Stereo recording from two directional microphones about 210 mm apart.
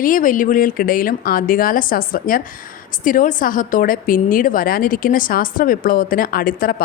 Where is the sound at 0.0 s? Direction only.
40° left (ahead or behind).